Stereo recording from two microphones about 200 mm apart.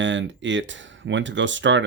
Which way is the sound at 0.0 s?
65° right (ahead or behind).